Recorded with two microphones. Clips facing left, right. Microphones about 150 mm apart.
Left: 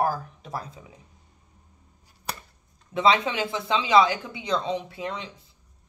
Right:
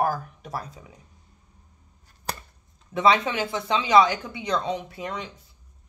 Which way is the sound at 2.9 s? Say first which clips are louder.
Right 1 dB; 25° left (ahead or behind).